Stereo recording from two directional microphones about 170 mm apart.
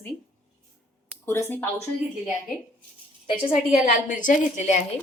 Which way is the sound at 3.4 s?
45° left (ahead or behind).